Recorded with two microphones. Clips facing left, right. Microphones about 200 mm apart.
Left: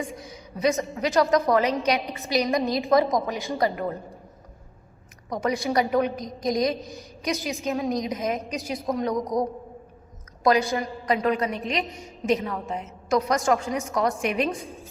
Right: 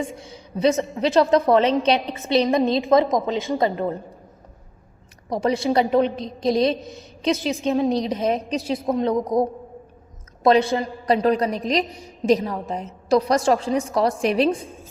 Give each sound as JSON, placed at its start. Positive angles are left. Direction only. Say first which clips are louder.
{"t": 0.0, "sound": "a woman's voice", "louder": "right 4 dB", "side_deg": -30}
{"t": 2.0, "sound": "a woman's voice", "louder": "right 3 dB", "side_deg": 15}
{"t": 2.3, "sound": "a woman's voice", "louder": "right 5 dB", "side_deg": -30}
{"t": 5.3, "sound": "a woman's voice", "louder": "right 4 dB", "side_deg": -30}